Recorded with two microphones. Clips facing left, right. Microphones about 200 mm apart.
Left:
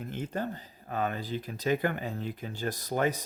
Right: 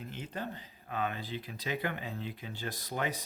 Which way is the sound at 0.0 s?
50° left (ahead or behind).